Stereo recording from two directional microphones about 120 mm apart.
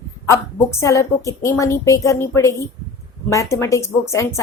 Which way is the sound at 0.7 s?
25° left (ahead or behind).